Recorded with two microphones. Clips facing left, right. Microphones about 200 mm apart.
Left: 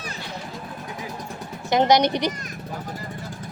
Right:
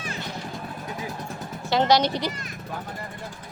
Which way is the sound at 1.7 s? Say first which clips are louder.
Left 3 dB; 20° left (ahead or behind).